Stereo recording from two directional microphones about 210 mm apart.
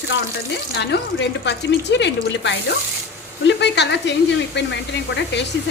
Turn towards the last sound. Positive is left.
turn(degrees=55)  # may be behind; listen again after turning